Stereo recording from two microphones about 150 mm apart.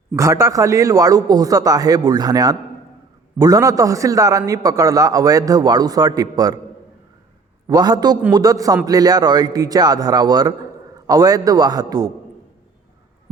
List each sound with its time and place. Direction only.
0.2 s a man's voice: 20° right (ahead or behind)
7.7 s a man's voice: 25° right (ahead or behind)